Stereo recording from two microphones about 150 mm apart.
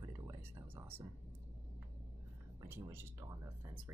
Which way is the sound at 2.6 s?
15° right (ahead or behind).